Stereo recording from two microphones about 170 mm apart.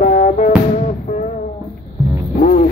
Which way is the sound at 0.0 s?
40° left (ahead or behind).